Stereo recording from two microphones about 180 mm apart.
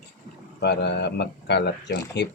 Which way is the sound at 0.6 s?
70° left (ahead or behind).